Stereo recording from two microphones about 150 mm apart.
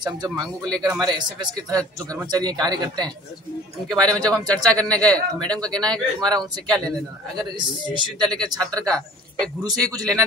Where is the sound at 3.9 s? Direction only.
5° left (ahead or behind).